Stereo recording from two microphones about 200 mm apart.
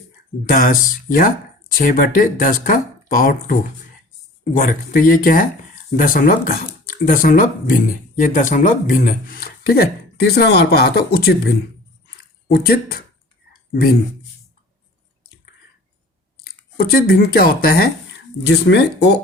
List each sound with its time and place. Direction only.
0.4 s speech: 45° left (ahead or behind)
4.5 s speech: 45° left (ahead or behind)
16.7 s speech: 50° left (ahead or behind)
18.4 s speech: 60° left (ahead or behind)